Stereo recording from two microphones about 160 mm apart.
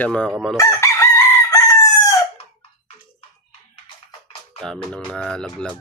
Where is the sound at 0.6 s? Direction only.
20° left (ahead or behind).